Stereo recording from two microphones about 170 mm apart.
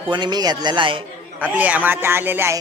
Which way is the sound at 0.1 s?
25° right (ahead or behind).